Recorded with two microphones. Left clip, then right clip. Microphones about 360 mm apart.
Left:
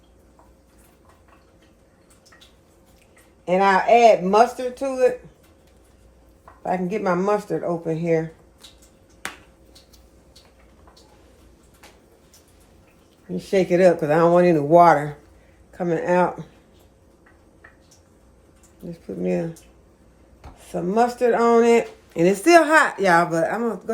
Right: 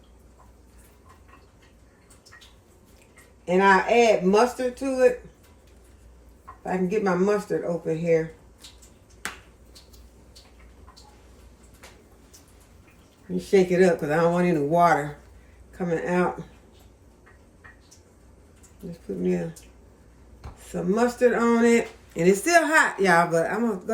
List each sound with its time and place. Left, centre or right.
3.4 s speech: centre
6.7 s speech: centre
13.3 s speech: centre
18.9 s speech: centre
20.8 s speech: centre